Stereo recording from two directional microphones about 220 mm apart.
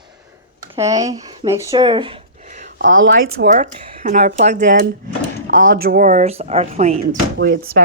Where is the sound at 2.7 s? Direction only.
60° right (ahead or behind).